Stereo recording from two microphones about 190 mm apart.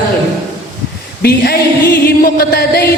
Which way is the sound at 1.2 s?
55° left (ahead or behind).